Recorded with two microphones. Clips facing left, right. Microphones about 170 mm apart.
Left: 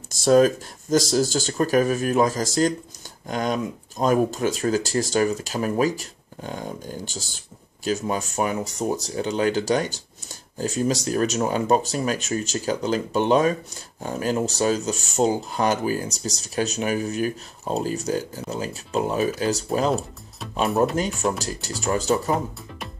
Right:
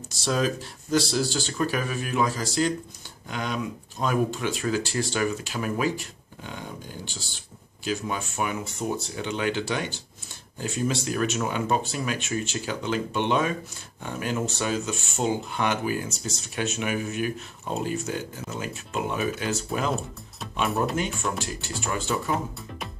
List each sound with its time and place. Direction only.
0.1 s speech: 50° left (ahead or behind)
20.9 s speech: 40° left (ahead or behind)